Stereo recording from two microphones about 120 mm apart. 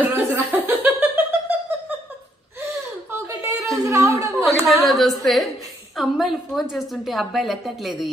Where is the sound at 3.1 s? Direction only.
30° right (ahead or behind).